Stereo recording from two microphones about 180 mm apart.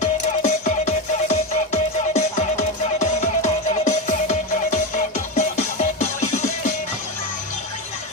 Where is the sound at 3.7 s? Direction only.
40° left (ahead or behind).